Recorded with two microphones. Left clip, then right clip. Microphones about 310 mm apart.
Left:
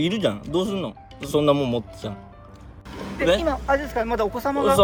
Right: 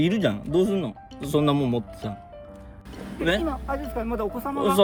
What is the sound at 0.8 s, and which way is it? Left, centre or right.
Speech, right.